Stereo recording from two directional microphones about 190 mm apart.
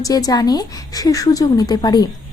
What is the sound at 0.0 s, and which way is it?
A woman's voice, 20° left (ahead or behind).